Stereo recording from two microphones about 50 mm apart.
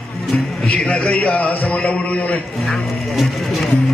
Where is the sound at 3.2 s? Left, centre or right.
Centre.